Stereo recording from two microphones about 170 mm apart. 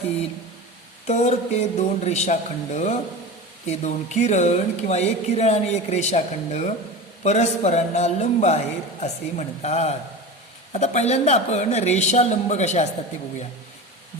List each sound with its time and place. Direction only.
1.0 s speech: 40° left (ahead or behind)